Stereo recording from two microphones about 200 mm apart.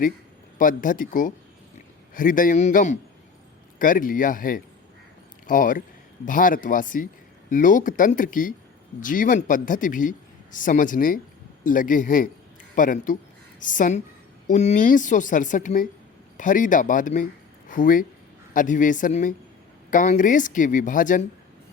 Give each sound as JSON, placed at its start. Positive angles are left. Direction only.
{"t": 0.6, "sound": "speech", "side_deg": 40}